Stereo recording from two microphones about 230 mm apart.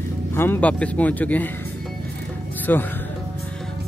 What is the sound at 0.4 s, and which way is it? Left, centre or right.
Speech, centre.